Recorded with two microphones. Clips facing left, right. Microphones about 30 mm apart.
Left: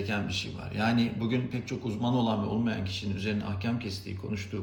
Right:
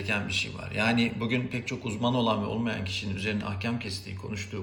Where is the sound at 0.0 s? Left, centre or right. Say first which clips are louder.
Right 3 dB; right.